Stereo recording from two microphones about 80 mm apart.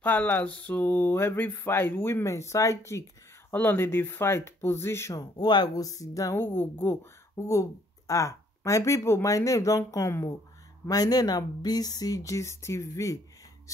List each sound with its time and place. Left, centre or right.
0.0 s speech: left
2.2 s speech: left
3.5 s speech: left
5.1 s speech: left
6.3 s speech: left
10.9 s speech: left